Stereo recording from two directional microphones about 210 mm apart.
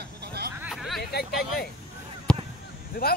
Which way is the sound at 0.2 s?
50° right (ahead or behind).